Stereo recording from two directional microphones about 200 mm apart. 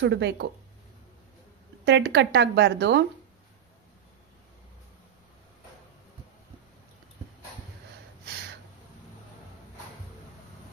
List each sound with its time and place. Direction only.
0.0 s speech: 60° right (ahead or behind)
1.8 s speech: 60° right (ahead or behind)